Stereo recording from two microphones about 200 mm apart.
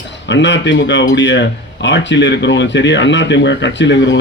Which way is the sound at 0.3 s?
65° left (ahead or behind).